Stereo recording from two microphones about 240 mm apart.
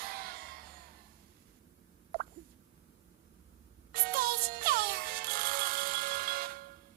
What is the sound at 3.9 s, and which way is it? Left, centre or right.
Music, right.